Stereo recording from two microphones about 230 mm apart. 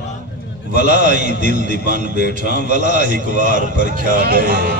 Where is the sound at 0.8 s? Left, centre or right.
Right.